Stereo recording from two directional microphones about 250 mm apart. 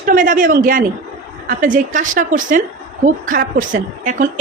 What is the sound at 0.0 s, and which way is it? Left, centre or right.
A woman's voice, right.